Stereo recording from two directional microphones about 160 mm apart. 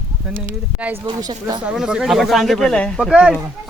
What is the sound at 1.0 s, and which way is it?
Speech, 30° right (ahead or behind).